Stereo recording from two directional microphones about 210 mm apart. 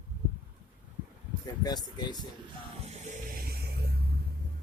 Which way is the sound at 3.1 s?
45° right (ahead or behind).